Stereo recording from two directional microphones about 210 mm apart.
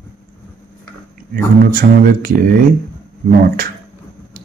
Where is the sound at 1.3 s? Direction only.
45° right (ahead or behind).